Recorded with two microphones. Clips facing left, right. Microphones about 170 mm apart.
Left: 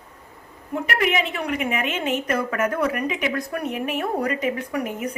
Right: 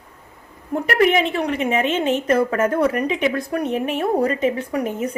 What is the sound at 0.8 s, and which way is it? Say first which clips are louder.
A woman's voice: right 6 dB; 40° right (ahead or behind).